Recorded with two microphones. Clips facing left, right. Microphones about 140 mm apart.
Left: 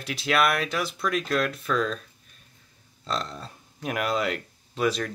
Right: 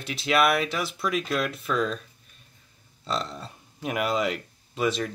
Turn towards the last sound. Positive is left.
turn(degrees=0)  # may be behind; listen again after turning